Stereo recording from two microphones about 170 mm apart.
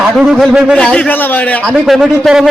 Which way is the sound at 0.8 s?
5° left (ahead or behind).